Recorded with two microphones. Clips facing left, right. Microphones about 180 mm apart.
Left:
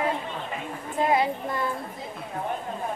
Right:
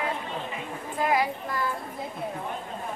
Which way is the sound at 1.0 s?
25° left (ahead or behind).